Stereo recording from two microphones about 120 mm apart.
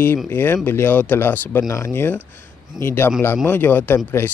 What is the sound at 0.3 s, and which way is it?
Speech, 20° left (ahead or behind).